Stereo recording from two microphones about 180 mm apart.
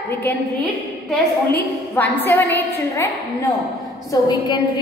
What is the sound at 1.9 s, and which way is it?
A woman's voice, 10° left (ahead or behind).